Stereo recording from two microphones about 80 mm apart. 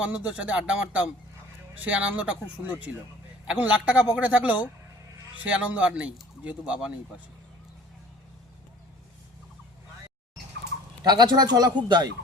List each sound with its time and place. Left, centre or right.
0.0 s speech: centre
11.0 s speech: right